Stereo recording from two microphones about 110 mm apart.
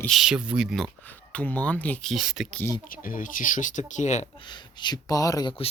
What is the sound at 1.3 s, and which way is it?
Speech, 10° left (ahead or behind).